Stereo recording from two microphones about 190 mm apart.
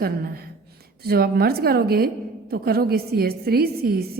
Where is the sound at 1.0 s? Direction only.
55° right (ahead or behind).